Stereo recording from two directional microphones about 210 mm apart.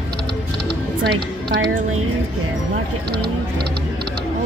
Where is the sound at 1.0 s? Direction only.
55° right (ahead or behind).